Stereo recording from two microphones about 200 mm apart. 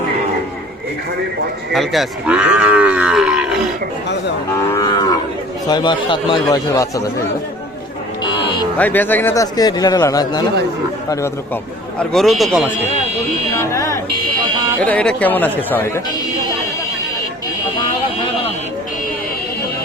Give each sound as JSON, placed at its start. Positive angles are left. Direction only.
{"t": 1.7, "sound": "speech", "side_deg": 0}
{"t": 4.7, "sound": "a man's voice", "side_deg": 20}
{"t": 8.3, "sound": "a sound", "side_deg": 25}
{"t": 8.8, "sound": "a man's voice", "side_deg": 10}
{"t": 11.9, "sound": "speech", "side_deg": 0}
{"t": 13.6, "sound": "a man's voice", "side_deg": 15}